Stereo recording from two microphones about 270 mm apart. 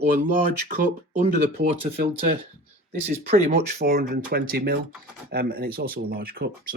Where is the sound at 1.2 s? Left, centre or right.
Right.